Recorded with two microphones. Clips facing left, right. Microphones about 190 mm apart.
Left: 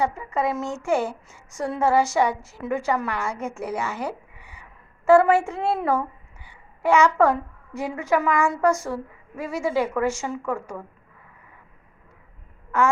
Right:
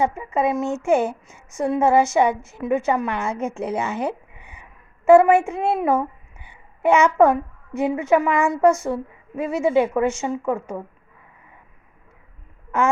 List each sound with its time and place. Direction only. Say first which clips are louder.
0.0 s a woman's voice: right 3 dB; 20° right (ahead or behind)
12.7 s quack: even; 20° right (ahead or behind)